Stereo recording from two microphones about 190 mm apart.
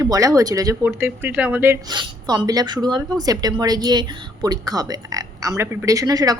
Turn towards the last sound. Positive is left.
turn(degrees=-20)  # may be behind; listen again after turning